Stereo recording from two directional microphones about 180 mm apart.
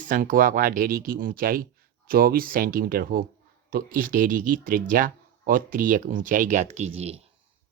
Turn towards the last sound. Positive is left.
turn(degrees=-35)  # may be behind; listen again after turning